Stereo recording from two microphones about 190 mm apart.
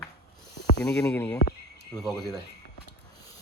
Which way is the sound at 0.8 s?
15° left (ahead or behind).